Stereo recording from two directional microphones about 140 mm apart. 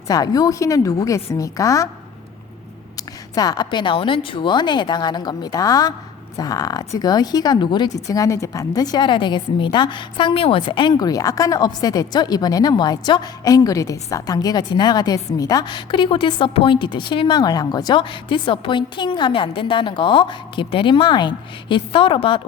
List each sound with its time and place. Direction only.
0.1 s speech: 25° left (ahead or behind)
3.3 s a woman's voice: 30° left (ahead or behind)